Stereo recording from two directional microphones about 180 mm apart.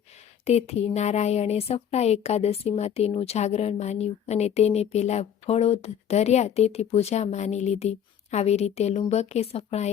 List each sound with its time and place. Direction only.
0.4 s a woman's voice: 35° left (ahead or behind)